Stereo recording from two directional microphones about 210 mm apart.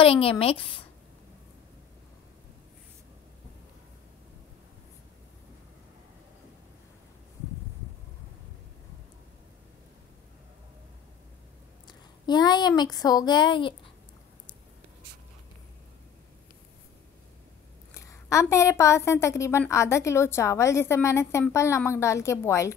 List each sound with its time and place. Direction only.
0.0 s a woman's voice: 25° left (ahead or behind)
11.9 s a woman's voice: 20° left (ahead or behind)
17.9 s a woman's voice: 15° left (ahead or behind)